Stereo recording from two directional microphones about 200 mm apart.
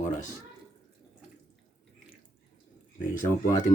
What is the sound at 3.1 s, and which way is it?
Speech, 40° left (ahead or behind).